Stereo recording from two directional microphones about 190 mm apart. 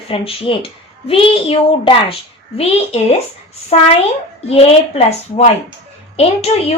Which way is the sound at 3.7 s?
30° left (ahead or behind).